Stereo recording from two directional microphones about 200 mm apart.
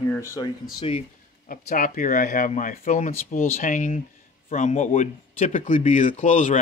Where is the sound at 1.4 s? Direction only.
40° left (ahead or behind).